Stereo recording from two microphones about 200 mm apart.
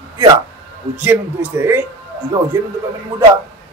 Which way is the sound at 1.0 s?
10° right (ahead or behind).